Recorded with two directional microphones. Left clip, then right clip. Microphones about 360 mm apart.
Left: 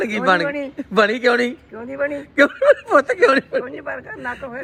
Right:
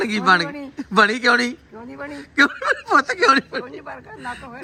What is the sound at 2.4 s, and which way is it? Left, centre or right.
Speech, centre.